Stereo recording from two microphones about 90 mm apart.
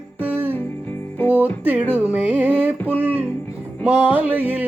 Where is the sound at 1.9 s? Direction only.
20° right (ahead or behind).